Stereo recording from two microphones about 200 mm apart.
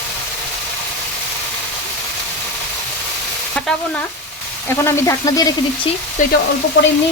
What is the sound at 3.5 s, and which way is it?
Speech, 5° left (ahead or behind).